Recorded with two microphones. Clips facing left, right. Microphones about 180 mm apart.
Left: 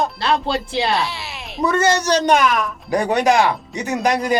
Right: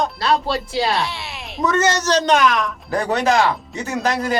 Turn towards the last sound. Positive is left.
turn(degrees=15)  # may be behind; listen again after turning